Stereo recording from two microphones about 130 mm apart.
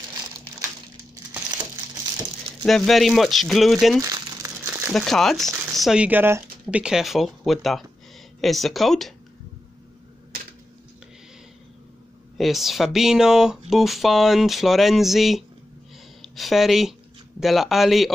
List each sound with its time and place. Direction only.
2.6 s speech: centre (ahead or behind)
4.0 s crumpling: 25° right (ahead or behind)
4.9 s speech: centre (ahead or behind); by 6.8 s 15° right (ahead or behind)
6.8 s speech: 5° right (ahead or behind)
12.4 s a woman's voice: centre (ahead or behind)